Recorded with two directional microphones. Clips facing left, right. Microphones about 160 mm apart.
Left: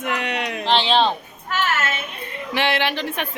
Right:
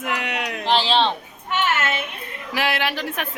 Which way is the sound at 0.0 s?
5° right (ahead or behind).